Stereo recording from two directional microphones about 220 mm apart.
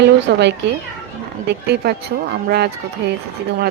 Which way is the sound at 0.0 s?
50° right (ahead or behind).